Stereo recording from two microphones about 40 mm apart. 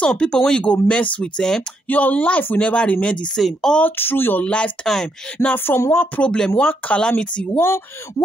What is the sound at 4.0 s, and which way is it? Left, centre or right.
Speech, left.